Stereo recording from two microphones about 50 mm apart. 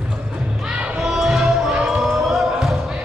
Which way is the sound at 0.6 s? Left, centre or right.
Right.